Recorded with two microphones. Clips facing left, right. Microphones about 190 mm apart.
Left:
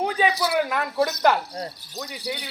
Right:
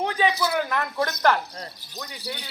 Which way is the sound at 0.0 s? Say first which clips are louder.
Left 1 dB; 10° left (ahead or behind).